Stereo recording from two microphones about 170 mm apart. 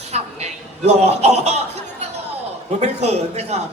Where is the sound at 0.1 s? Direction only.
40° right (ahead or behind).